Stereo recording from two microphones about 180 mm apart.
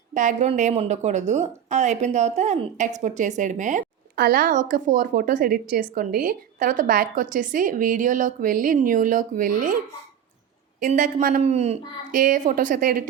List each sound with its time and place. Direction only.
0.1 s a woman's voice: 45° right (ahead or behind)
11.4 s a woman's voice: 35° right (ahead or behind)